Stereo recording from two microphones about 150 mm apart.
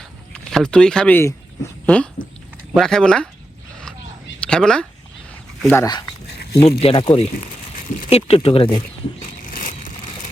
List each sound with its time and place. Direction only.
0.3 s speech: 5° left (ahead or behind)
2.7 s speech: 5° left (ahead or behind)
4.4 s speech: 5° left (ahead or behind)
5.6 s speech: 15° left (ahead or behind)
6.2 s a sound: 90° left
6.7 s speech: 40° left (ahead or behind)
9.5 s a sound: 65° left (ahead or behind)